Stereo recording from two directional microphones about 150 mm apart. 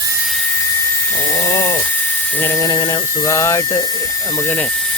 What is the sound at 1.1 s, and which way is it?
Cat, 15° left (ahead or behind).